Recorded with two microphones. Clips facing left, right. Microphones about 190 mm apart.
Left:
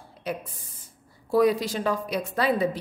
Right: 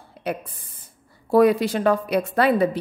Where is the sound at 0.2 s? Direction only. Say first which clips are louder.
Right 4 dB; 60° right (ahead or behind).